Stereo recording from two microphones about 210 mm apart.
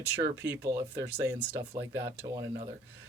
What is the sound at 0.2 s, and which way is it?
Speech, 15° right (ahead or behind).